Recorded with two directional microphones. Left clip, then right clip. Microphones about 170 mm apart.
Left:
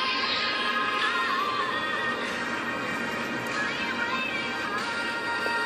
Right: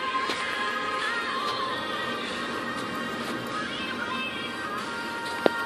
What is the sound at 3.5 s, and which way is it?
Music, 45° left (ahead or behind).